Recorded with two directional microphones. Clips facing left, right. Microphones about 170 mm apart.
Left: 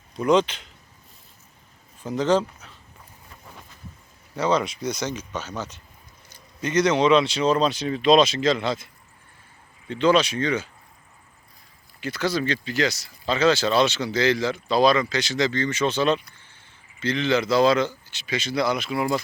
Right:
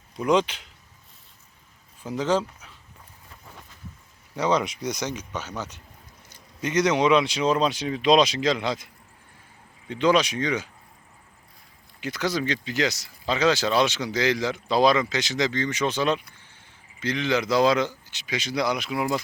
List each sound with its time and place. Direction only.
0.2 s speech: 10° right (ahead or behind)
2.0 s speech: 10° right (ahead or behind)
4.4 s speech: 15° right (ahead or behind)
9.9 s speech: 15° right (ahead or behind)
11.9 s speech: 15° right (ahead or behind)